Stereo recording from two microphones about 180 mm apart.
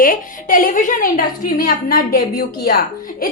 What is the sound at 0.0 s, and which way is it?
A woman's voice, 50° left (ahead or behind).